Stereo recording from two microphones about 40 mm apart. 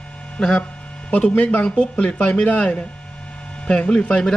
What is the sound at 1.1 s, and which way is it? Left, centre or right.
Speech, left.